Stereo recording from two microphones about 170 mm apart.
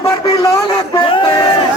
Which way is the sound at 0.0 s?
20° left (ahead or behind).